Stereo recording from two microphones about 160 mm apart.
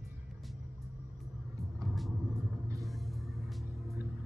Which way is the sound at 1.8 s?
Centre (ahead or behind).